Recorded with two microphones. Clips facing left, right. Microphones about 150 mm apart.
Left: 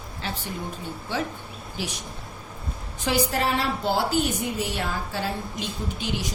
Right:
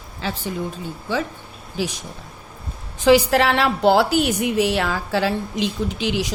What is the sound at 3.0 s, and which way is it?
A woman's voice, 90° right.